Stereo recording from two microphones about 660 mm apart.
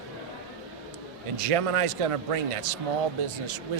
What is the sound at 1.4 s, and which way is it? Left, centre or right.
Speech, right.